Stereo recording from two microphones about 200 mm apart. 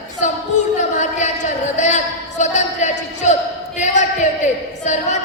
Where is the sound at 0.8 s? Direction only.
35° left (ahead or behind).